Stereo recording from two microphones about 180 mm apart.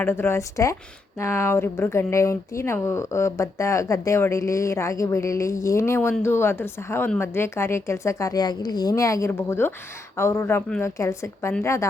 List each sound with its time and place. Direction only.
0.0 s speech: 15° left (ahead or behind)